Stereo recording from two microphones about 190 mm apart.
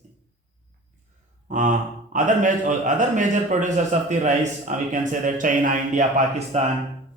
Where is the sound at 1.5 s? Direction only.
40° right (ahead or behind).